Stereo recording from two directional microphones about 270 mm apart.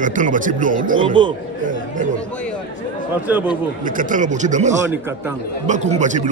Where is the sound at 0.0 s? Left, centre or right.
Right.